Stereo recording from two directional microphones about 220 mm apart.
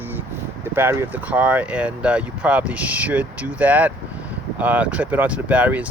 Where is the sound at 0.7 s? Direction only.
10° right (ahead or behind).